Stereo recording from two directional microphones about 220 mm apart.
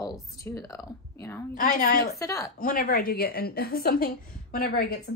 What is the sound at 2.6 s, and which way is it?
A woman's voice, 40° left (ahead or behind).